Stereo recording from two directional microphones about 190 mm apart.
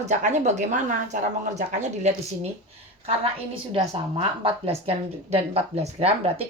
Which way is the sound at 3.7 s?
30° right (ahead or behind).